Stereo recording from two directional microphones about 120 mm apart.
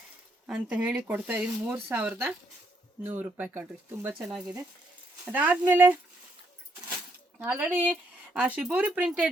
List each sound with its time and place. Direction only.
0.4 s speech: 5° right (ahead or behind)
4.2 s speech: centre (ahead or behind)
5.2 s speech: 10° right (ahead or behind)
7.3 s speech: 15° right (ahead or behind)